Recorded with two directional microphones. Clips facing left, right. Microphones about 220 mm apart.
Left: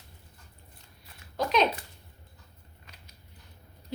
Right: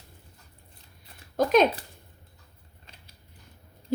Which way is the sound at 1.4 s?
50° right (ahead or behind).